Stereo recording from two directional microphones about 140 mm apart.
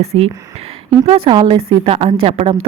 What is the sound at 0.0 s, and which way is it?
A woman's voice, 45° right (ahead or behind).